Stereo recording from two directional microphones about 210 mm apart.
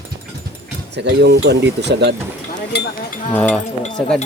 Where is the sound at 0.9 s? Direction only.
55° right (ahead or behind).